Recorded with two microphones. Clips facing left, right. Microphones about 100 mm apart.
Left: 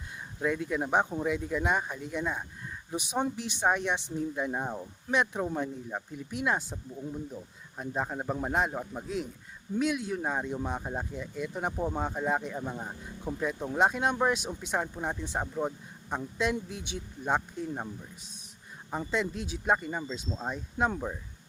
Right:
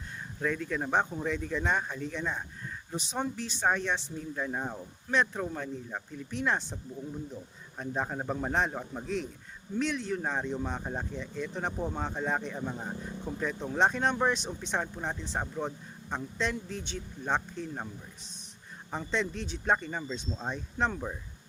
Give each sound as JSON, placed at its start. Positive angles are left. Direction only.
{"t": 0.3, "sound": "speech", "side_deg": 15}
{"t": 7.8, "sound": "a man's voice", "side_deg": 5}
{"t": 18.9, "sound": "speech", "side_deg": 10}